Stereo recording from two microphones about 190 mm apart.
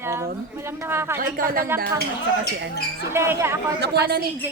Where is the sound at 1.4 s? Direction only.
45° right (ahead or behind).